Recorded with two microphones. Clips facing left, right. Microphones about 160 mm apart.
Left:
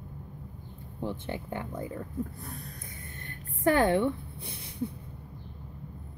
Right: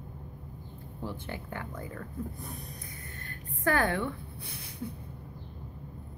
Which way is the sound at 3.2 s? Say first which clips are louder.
Left 4 dB; 25° left (ahead or behind).